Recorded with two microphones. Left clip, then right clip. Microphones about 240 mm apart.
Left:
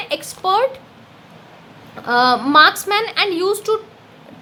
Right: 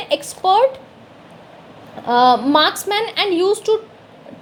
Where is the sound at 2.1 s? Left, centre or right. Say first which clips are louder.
Right 2 dB; centre.